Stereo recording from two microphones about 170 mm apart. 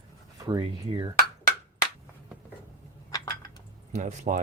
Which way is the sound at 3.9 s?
45° right (ahead or behind).